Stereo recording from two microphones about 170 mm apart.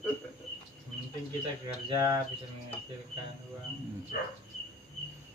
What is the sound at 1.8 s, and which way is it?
Speech, 20° right (ahead or behind).